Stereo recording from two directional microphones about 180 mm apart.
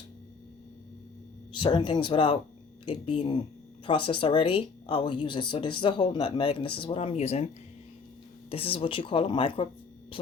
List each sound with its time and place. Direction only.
1.5 s speech: 25° left (ahead or behind)